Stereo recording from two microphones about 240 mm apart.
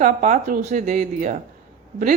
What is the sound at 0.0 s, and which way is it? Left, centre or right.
Speech, right.